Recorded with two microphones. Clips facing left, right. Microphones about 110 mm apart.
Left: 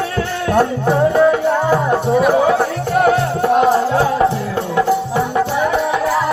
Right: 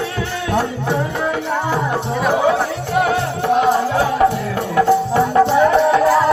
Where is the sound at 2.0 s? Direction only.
Centre (ahead or behind).